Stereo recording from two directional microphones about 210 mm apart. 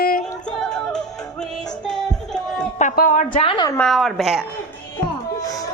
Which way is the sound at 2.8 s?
40° left (ahead or behind).